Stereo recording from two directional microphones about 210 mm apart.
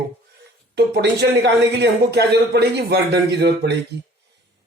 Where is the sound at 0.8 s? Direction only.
50° right (ahead or behind).